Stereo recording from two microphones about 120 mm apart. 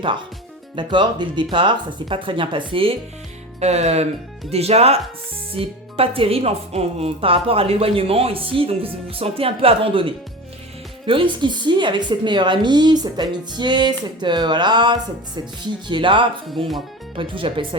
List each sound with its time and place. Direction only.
0.8 s speech: 40° right (ahead or behind)
3.6 s speech: 65° right (ahead or behind); by 17.7 s 45° right (ahead or behind)